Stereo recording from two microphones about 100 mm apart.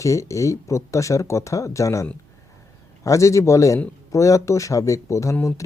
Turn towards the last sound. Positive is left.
turn(degrees=30)  # may be behind; listen again after turning